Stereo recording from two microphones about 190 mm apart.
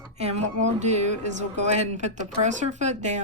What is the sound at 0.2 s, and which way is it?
Speech, 35° right (ahead or behind).